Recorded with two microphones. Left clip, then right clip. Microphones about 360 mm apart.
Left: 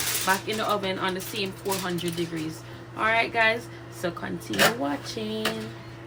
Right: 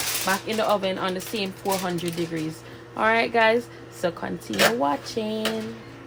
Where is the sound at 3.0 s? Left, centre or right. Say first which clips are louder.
Right 3 dB; centre.